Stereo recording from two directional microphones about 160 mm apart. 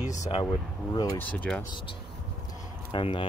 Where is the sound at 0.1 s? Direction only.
45° left (ahead or behind).